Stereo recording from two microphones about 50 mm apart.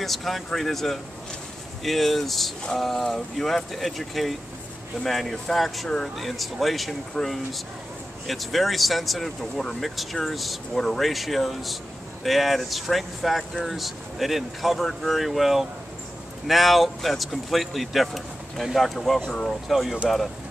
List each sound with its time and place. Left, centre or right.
0.0 s speech: centre